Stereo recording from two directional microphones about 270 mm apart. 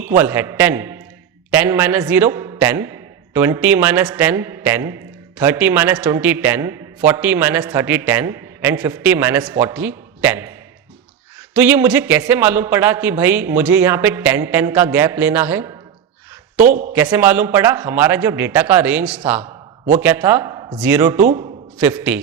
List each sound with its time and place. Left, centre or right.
0.0 s a man's voice: centre
11.5 s a man's voice: centre
16.6 s a man's voice: right
16.9 s a man's voice: centre
19.5 s a sound: right
20.0 s a man's voice: centre